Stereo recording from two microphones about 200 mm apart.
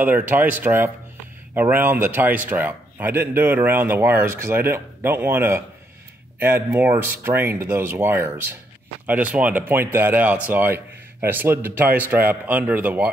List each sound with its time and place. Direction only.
0.0 s a man's voice: 10° right (ahead or behind)